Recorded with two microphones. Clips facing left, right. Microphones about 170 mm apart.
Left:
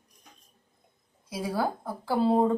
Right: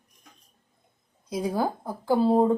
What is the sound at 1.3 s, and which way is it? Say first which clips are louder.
Speech: right 3 dB; 15° right (ahead or behind).